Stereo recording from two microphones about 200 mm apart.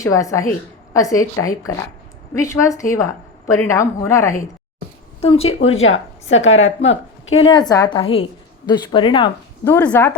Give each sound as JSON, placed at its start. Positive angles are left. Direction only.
{"t": 0.0, "sound": "a woman's voice", "side_deg": 15}
{"t": 5.2, "sound": "a woman's voice", "side_deg": 30}
{"t": 5.5, "sound": "speech", "side_deg": 90}
{"t": 6.3, "sound": "a woman's voice", "side_deg": 70}
{"t": 7.3, "sound": "a woman's voice", "side_deg": 25}
{"t": 9.6, "sound": "a woman's voice", "side_deg": 10}